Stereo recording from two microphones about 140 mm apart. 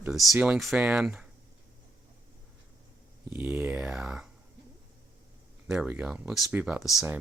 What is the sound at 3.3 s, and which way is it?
Speech, 15° right (ahead or behind).